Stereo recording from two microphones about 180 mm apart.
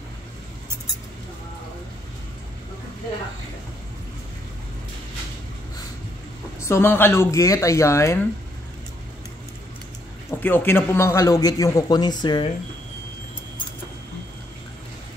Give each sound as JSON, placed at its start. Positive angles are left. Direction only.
{"t": 6.7, "sound": "speech", "side_deg": 10}
{"t": 10.3, "sound": "speech", "side_deg": 10}